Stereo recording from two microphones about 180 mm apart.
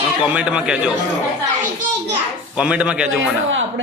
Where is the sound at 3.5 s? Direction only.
90° right.